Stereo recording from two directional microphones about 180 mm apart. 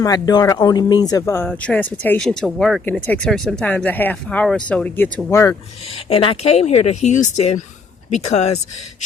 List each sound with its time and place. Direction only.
0.0 s speech: 20° left (ahead or behind)
6.1 s speech: 30° left (ahead or behind)